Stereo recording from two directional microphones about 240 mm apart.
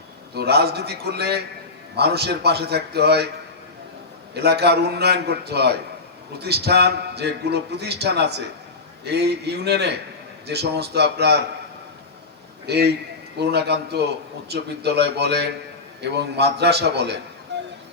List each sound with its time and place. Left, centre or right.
0.3 s a man's voice: right
4.4 s a man's voice: right
12.6 s a man's voice: right
17.5 s music: right